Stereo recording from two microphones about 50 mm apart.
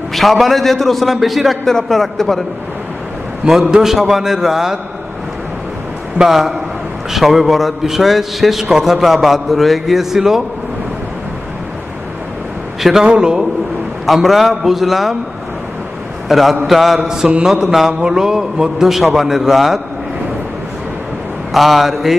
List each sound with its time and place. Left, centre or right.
0.1 s a man's voice: centre
3.4 s a man's voice: centre
6.2 s a man's voice: centre
13.0 s a man's voice: centre
14.0 s a man's voice: centre
16.3 s a man's voice: centre
21.5 s a man's voice: centre